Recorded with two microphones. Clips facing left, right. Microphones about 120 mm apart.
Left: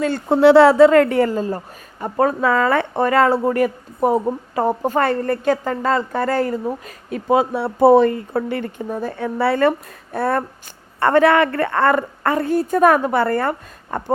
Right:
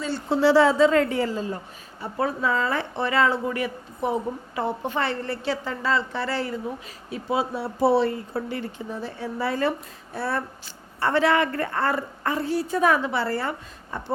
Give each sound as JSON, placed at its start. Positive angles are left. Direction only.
{"t": 0.0, "sound": "a woman's voice", "side_deg": 50}
{"t": 2.5, "sound": "a woman's voice", "side_deg": 65}